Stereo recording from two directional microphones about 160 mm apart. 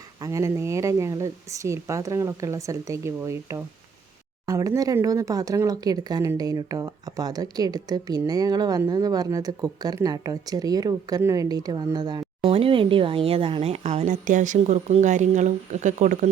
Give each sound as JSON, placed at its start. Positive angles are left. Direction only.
{"t": 0.2, "sound": "speech", "side_deg": -20}